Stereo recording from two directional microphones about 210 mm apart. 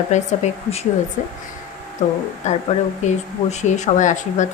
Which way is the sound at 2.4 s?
35° left (ahead or behind).